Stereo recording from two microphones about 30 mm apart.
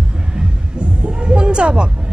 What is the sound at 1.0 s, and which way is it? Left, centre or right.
Speech, right.